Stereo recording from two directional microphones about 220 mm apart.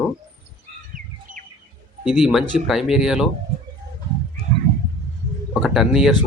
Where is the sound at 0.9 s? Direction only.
35° right (ahead or behind).